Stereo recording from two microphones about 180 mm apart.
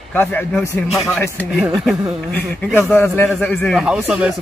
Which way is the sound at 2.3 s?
10° left (ahead or behind).